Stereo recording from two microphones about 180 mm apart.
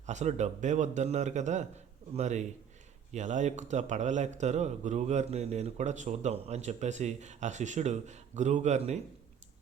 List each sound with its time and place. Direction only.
0.0 s a man's voice: 40° right (ahead or behind)